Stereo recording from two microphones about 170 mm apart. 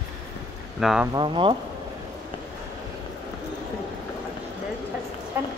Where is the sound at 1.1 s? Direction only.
30° right (ahead or behind).